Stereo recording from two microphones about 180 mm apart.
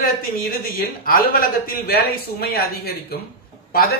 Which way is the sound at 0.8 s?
55° left (ahead or behind).